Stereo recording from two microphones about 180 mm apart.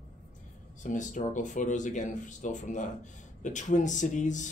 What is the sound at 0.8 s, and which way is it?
Speech, 45° left (ahead or behind).